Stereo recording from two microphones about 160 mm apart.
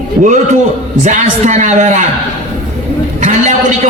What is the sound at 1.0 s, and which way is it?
A man's voice, 50° right (ahead or behind).